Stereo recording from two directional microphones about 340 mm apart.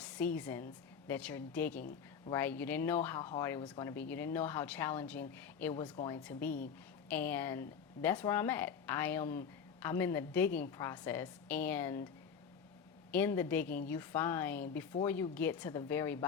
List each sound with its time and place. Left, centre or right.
0.0 s a woman's voice: centre
13.1 s speech: centre